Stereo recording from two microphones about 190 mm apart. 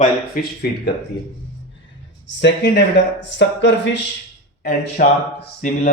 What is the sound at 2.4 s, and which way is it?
Speech, 65° left (ahead or behind).